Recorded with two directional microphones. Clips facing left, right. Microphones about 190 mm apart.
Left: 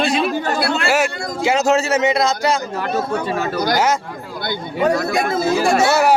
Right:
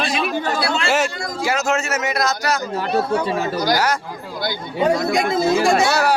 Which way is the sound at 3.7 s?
25° left (ahead or behind).